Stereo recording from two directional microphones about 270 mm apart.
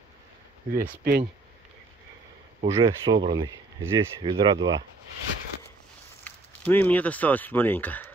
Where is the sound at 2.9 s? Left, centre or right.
Centre.